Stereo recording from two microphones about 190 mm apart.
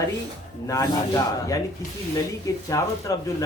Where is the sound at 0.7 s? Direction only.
20° left (ahead or behind).